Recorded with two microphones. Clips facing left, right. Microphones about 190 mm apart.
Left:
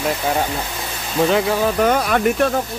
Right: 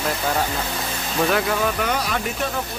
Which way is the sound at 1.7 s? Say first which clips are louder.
Left 7 dB; 50° left (ahead or behind).